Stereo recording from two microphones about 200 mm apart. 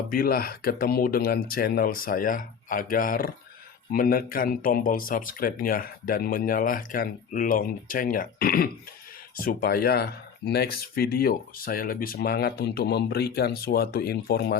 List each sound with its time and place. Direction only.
0.1 s speech: 45° left (ahead or behind)